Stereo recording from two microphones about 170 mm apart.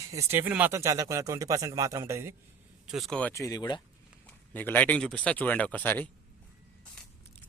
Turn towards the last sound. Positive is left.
turn(degrees=10)  # may be behind; listen again after turning